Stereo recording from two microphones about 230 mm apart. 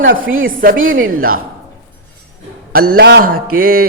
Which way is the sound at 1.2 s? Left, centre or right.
Right.